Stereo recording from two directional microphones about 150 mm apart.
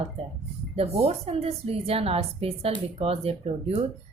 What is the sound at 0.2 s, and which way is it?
A woman's voice, 40° right (ahead or behind).